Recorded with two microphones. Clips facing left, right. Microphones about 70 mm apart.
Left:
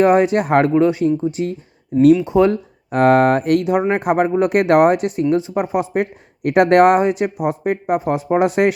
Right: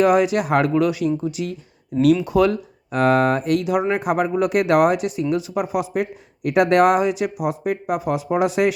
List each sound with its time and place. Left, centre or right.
0.0 s speech: left
2.9 s speech: left